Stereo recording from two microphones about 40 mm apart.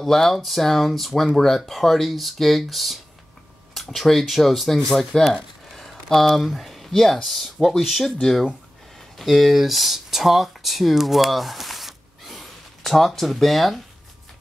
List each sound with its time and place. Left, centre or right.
0.0 s speech: centre
5.1 s speech: centre
5.7 s a sound: centre
6.3 s speech: centre